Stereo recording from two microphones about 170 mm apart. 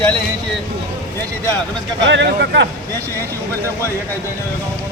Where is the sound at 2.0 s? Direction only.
85° right.